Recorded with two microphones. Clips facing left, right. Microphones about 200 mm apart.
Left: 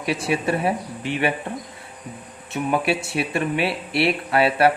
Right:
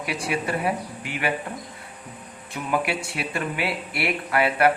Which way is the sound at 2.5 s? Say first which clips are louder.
Left 4 dB; 25° left (ahead or behind).